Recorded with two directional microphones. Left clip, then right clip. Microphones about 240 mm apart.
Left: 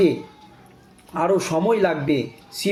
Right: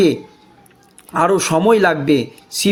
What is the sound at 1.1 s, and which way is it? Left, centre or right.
A man's voice, right.